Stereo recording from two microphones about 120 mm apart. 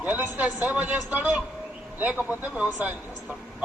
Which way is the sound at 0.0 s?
15° right (ahead or behind).